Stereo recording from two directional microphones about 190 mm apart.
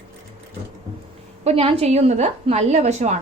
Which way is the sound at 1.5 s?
30° right (ahead or behind).